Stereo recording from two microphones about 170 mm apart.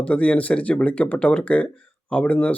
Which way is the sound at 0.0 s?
5° left (ahead or behind).